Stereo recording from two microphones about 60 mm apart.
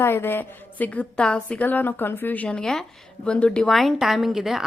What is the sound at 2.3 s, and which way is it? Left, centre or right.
Speech, left.